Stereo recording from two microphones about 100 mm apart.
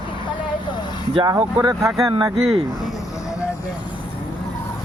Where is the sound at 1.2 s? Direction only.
45° right (ahead or behind).